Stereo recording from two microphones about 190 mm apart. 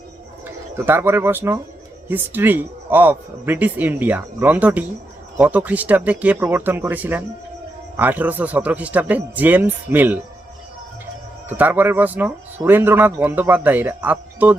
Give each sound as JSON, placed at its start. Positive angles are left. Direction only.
{"t": 0.4, "sound": "speech", "side_deg": -10}
{"t": 11.4, "sound": "speech", "side_deg": -10}